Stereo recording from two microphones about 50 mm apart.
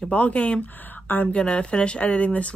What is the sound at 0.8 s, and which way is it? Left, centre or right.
Speech, left.